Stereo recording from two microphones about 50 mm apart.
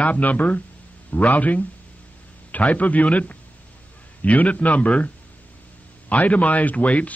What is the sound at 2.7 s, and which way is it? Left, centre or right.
A man's voice, left.